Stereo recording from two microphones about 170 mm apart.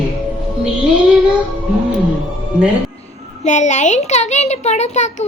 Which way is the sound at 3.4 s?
45° left (ahead or behind).